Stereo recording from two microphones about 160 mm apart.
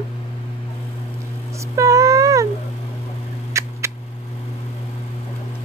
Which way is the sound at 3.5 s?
20° right (ahead or behind).